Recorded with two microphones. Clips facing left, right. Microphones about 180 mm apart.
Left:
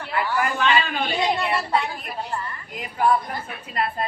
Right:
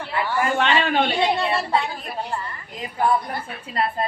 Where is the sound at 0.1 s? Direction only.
25° right (ahead or behind).